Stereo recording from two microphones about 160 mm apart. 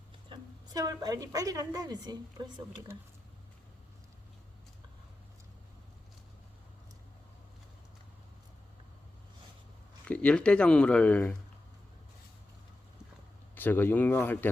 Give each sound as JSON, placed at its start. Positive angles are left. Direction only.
{"t": 0.3, "sound": "a woman's voice", "side_deg": -25}
{"t": 10.1, "sound": "speech", "side_deg": 10}
{"t": 13.6, "sound": "speech", "side_deg": 10}